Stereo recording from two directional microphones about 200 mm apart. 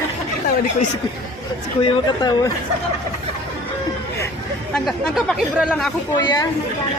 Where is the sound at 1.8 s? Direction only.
20° left (ahead or behind).